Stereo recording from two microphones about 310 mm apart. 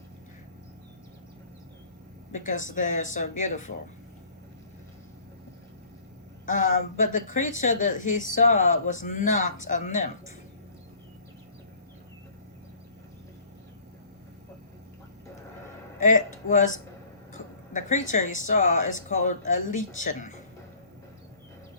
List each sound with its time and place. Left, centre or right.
2.3 s a woman's voice: left
6.4 s a woman's voice: left
16.0 s a woman's voice: left